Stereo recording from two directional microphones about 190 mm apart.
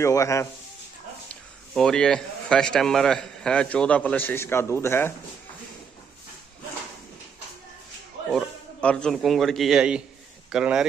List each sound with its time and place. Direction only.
0.0 s speech: 15° left (ahead or behind)
1.3 s a man's voice: 5° left (ahead or behind)
8.3 s a man's voice: centre (ahead or behind)